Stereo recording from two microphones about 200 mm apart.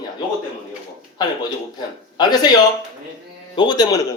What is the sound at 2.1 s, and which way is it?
Speech, 20° left (ahead or behind).